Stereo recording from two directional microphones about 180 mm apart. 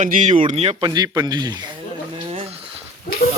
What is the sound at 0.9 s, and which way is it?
Speech, 20° right (ahead or behind).